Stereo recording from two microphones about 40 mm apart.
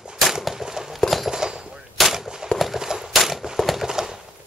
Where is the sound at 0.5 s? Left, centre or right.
Centre.